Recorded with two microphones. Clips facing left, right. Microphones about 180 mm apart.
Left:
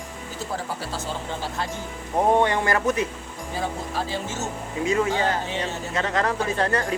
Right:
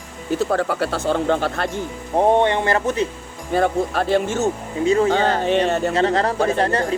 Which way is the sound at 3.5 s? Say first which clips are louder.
Right 10 dB; 65° right (ahead or behind).